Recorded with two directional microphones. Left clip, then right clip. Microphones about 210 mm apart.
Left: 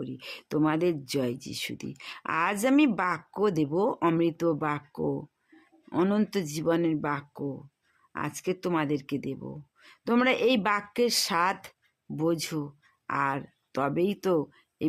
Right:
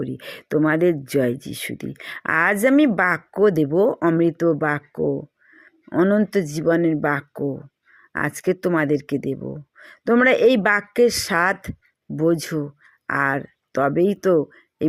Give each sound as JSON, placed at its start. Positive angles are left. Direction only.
{"t": 0.0, "sound": "speech", "side_deg": -20}